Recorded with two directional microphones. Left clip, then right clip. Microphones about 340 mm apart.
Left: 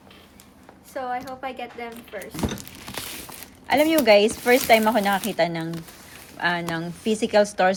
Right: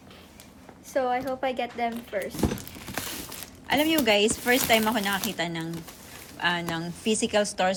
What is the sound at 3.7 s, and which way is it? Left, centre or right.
Speech, centre.